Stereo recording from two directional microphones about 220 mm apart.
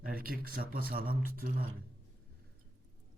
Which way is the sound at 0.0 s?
40° right (ahead or behind).